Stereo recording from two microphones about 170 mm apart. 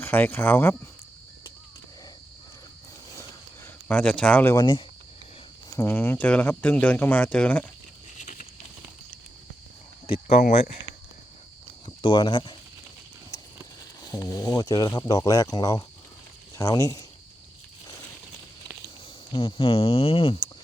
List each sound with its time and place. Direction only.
0.0 s speech: 10° left (ahead or behind)
3.2 s a sound: 10° left (ahead or behind)
4.5 s speech: 25° left (ahead or behind)
5.7 s speech: 15° left (ahead or behind)
8.2 s a sound: 45° left (ahead or behind)
12.0 s speech: 25° left (ahead or behind)
14.0 s speech: 20° left (ahead or behind)
19.3 s speech: 30° left (ahead or behind)